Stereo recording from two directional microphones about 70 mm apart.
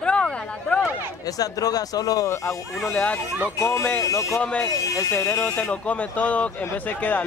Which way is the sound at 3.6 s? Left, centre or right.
Left.